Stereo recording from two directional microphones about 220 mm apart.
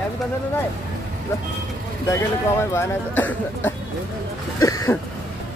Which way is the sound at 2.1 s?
10° left (ahead or behind).